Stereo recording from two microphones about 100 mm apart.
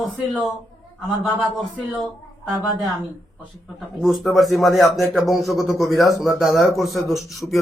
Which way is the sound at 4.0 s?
Centre (ahead or behind).